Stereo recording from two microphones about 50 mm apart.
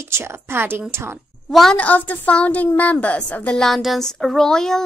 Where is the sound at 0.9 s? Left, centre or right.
Right.